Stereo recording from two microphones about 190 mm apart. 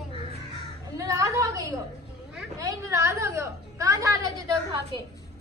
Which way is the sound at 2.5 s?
15° right (ahead or behind).